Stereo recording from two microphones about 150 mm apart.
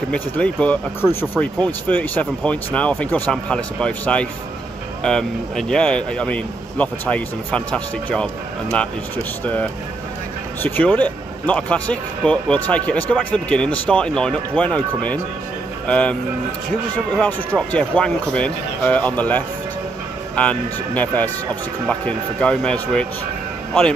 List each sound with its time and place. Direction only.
0.1 s speech: 10° left (ahead or behind)
10.6 s speech: 10° left (ahead or behind)